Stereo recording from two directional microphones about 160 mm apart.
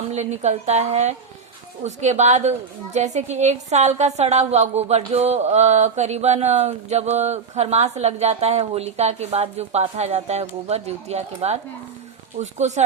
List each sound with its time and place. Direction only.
0.1 s a woman's voice: 45° right (ahead or behind)